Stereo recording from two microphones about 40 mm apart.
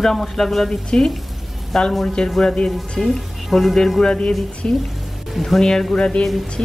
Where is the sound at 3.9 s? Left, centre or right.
Left.